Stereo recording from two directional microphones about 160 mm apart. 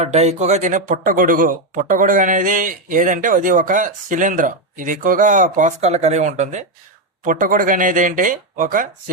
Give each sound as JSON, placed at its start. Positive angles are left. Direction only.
{"t": 0.0, "sound": "speech", "side_deg": -45}
{"t": 7.3, "sound": "speech", "side_deg": -55}